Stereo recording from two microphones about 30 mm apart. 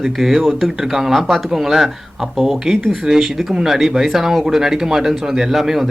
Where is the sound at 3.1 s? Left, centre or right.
Right.